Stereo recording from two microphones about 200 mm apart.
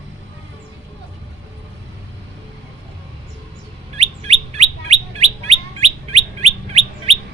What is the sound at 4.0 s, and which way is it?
Bird, 30° right (ahead or behind).